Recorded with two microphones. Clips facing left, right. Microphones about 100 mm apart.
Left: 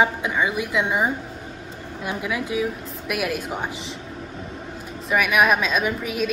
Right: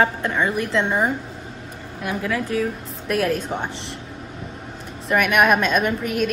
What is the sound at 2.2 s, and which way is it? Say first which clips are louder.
A woman's voice: right 2 dB; 15° left (ahead or behind).